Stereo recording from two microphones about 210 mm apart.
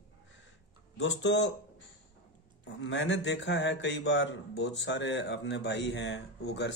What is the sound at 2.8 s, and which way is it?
A man's voice, 60° left (ahead or behind).